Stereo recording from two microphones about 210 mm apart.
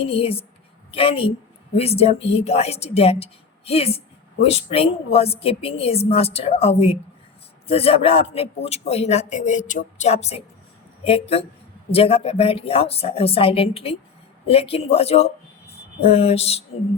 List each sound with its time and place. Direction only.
0.0 s a man's voice: 25° left (ahead or behind)